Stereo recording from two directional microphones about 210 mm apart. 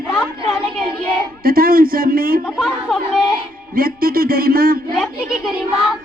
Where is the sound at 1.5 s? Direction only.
45° right (ahead or behind).